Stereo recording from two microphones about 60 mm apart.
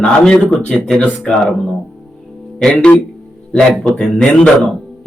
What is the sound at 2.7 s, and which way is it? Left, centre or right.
Speech, centre.